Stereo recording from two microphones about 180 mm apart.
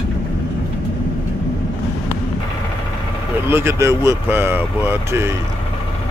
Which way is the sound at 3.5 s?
15° right (ahead or behind).